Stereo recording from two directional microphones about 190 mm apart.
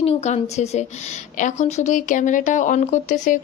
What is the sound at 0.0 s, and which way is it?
Speech, 35° left (ahead or behind).